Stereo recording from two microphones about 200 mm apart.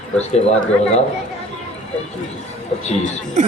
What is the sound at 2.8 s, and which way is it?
Speech, 35° left (ahead or behind).